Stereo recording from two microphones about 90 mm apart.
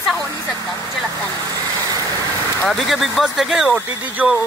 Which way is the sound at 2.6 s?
Centre (ahead or behind).